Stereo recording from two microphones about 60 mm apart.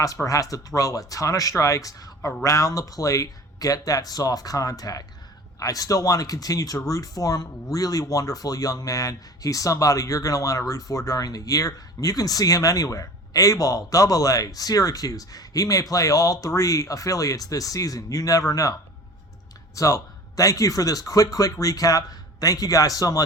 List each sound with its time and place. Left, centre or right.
0.0 s speech: left
2.4 s speech: left
5.5 s speech: left